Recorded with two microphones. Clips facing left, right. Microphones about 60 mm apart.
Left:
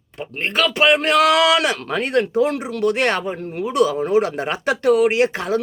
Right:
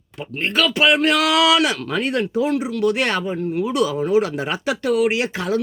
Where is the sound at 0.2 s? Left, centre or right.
Left.